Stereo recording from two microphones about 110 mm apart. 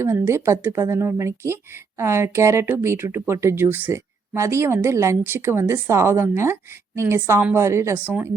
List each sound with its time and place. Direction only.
0.0 s speech: 25° right (ahead or behind)